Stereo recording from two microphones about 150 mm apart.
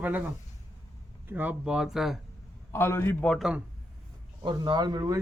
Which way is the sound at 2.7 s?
15° left (ahead or behind).